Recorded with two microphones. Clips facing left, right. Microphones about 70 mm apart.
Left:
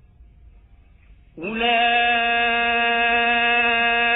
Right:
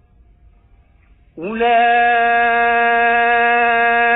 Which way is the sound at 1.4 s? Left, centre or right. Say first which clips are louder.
Right 7 dB; right.